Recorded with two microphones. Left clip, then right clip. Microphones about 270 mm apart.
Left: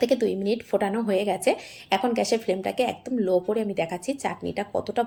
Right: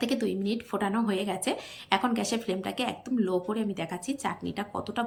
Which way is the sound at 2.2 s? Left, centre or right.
Centre.